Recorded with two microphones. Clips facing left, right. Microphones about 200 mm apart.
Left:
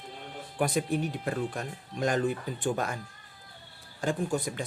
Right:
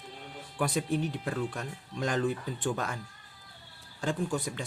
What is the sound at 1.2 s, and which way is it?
Speech, 40° left (ahead or behind).